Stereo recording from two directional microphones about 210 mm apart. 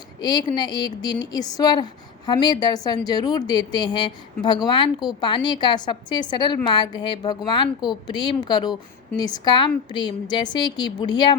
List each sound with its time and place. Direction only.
0.2 s speech: 20° left (ahead or behind)